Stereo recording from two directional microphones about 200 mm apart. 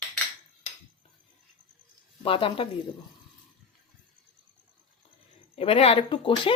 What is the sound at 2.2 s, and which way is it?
Speech, 25° left (ahead or behind).